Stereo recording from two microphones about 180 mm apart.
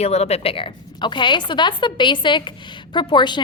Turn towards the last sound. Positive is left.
turn(degrees=25)  # may be behind; listen again after turning